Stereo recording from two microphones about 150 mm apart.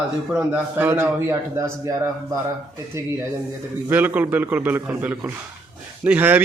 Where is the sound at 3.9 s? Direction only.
10° right (ahead or behind).